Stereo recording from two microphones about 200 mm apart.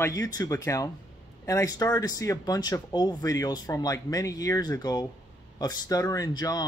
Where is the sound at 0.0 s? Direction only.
20° left (ahead or behind).